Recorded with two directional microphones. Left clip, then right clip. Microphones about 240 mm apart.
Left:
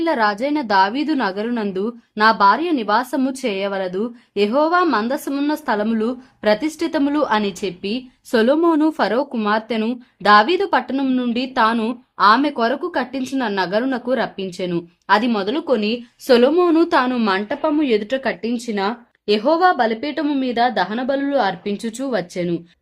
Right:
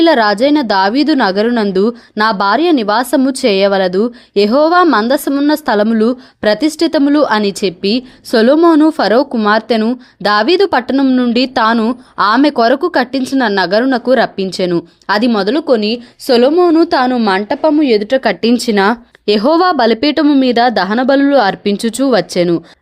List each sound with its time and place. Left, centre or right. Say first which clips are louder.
0.0 s a woman's voice: right 9 dB; right